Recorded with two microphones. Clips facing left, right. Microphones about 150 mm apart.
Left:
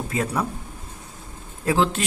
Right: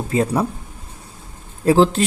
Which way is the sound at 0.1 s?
30° right (ahead or behind).